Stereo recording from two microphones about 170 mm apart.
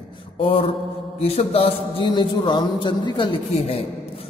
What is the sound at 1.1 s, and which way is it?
A man's voice, 35° left (ahead or behind).